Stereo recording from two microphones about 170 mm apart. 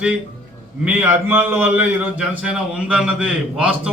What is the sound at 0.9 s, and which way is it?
A man's voice, 10° right (ahead or behind).